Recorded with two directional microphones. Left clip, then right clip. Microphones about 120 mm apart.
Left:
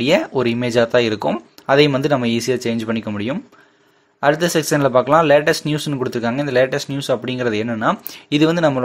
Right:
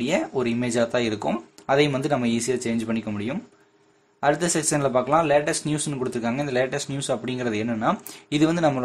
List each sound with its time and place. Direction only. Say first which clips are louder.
0.0 s speech: left 8 dB; 40° left (ahead or behind)